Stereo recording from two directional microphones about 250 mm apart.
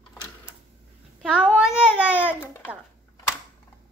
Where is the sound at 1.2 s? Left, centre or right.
Centre.